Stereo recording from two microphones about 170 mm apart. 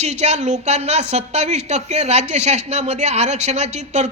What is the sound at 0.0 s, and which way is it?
Speech, 40° right (ahead or behind).